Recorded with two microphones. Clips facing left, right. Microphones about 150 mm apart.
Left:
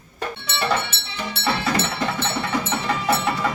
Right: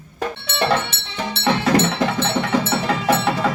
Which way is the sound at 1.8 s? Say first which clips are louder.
Right 5 dB; 90° right.